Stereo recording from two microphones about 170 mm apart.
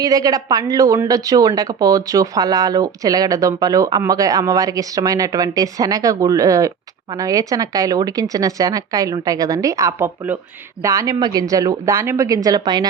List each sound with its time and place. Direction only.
0.0 s a woman's voice: 20° right (ahead or behind)